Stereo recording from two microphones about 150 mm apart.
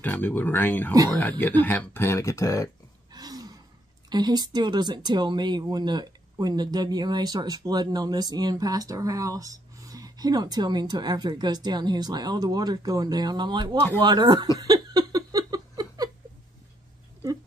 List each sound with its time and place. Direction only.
0.0 s speech: 15° left (ahead or behind)
3.1 s gasp: 25° right (ahead or behind)
4.1 s speech: 30° right (ahead or behind)
14.6 s laughter: 25° right (ahead or behind)